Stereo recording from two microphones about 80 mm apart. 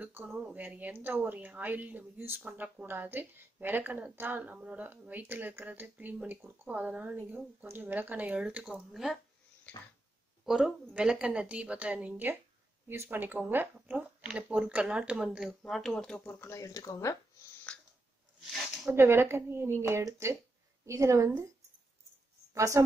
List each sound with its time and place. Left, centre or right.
0.0 s a woman's voice: right
8.9 s speech: centre
9.7 s a sound: centre
10.4 s a woman's voice: centre
15.6 s speech: centre
16.3 s speech: left
17.7 s chewing: centre
18.4 s a sound: centre
18.9 s speech: right
22.5 s a woman's voice: right